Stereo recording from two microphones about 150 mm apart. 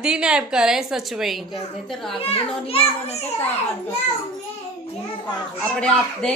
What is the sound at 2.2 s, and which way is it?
A child's voice, 40° left (ahead or behind).